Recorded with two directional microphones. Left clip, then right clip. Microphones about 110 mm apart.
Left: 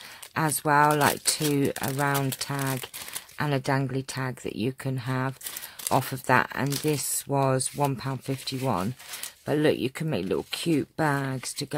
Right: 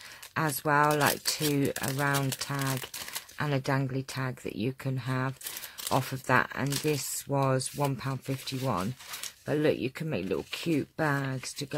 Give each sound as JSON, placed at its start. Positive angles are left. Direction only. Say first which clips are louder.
{"t": 0.3, "sound": "speech", "louder": "left 4 dB", "side_deg": 30}